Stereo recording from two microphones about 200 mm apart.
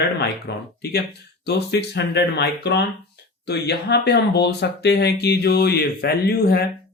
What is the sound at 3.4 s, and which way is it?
Mantra, 55° left (ahead or behind).